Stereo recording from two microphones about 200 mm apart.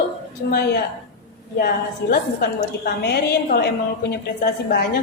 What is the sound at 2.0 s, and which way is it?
A woman's voice, 60° left (ahead or behind).